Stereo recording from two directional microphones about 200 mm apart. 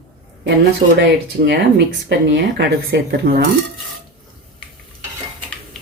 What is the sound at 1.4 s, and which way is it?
Speech, 55° right (ahead or behind).